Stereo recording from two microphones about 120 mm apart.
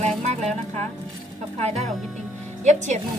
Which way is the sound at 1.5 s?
65° right (ahead or behind).